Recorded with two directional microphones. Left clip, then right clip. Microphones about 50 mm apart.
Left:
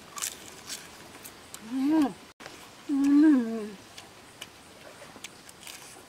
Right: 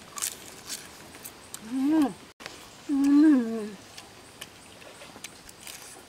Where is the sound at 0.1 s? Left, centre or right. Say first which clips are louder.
Right 1 dB; centre.